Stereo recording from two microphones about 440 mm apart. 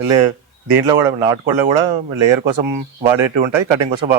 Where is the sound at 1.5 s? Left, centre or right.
Right.